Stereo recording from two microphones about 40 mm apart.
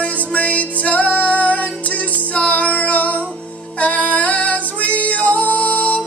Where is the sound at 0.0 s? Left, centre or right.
Left.